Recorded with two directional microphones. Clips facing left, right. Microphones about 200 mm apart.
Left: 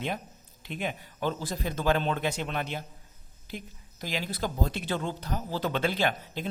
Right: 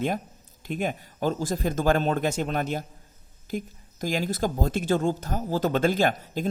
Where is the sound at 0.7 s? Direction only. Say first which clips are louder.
Right 5 dB; 45° right (ahead or behind).